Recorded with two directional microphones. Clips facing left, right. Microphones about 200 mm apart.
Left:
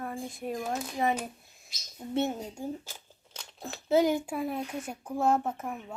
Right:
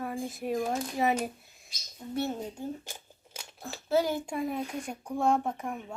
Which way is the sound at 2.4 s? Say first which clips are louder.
Right 1 dB; 10° left (ahead or behind).